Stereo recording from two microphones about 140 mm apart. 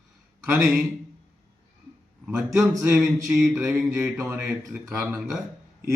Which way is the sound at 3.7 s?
10° right (ahead or behind).